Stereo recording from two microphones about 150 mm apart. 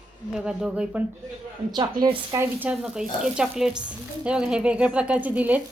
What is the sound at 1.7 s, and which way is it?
Speech, 30° right (ahead or behind).